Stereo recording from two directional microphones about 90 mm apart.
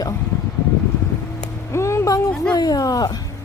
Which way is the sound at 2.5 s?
45° left (ahead or behind).